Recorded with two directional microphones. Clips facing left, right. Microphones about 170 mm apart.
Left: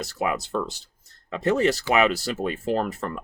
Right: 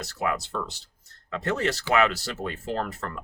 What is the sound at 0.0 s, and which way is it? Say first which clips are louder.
Speech: left 2 dB; 15° left (ahead or behind).